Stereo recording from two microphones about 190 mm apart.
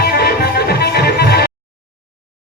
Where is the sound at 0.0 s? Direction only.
55° left (ahead or behind).